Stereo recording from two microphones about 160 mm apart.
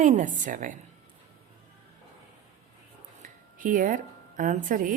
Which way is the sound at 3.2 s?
55° right (ahead or behind).